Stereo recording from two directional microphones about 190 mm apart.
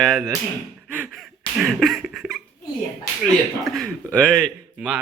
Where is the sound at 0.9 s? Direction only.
Centre (ahead or behind).